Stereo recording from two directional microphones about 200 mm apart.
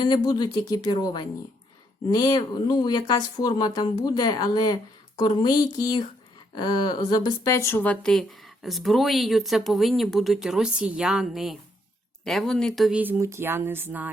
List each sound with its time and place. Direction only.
0.0 s speech: 20° left (ahead or behind); by 14.1 s 10° right (ahead or behind)